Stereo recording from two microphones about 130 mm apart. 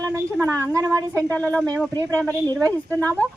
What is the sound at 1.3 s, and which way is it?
Speech, 10° left (ahead or behind).